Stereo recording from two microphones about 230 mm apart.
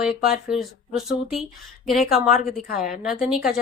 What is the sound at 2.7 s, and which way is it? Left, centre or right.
Speech, left.